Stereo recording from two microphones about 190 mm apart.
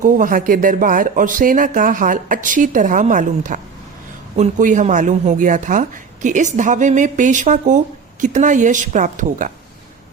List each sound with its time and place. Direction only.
0.0 s speech: 45° right (ahead or behind)